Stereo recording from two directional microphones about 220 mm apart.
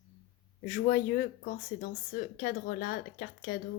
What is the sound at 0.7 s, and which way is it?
Speech, 35° left (ahead or behind).